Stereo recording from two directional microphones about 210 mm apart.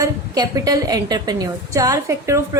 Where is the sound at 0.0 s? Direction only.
15° right (ahead or behind).